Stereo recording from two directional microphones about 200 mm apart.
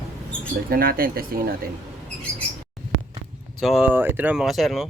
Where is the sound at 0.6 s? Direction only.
45° right (ahead or behind).